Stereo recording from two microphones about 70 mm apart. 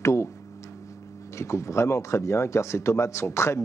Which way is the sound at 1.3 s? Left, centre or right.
Left.